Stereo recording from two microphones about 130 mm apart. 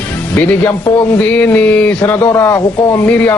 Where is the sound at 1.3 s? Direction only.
10° left (ahead or behind).